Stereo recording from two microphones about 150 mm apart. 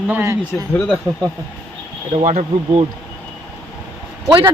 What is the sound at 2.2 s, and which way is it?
Speech, 50° right (ahead or behind).